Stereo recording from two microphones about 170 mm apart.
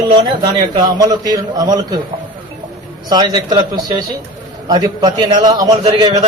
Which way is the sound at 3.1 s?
25° right (ahead or behind).